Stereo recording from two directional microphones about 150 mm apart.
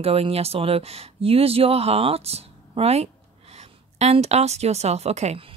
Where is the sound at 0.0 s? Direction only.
40° right (ahead or behind).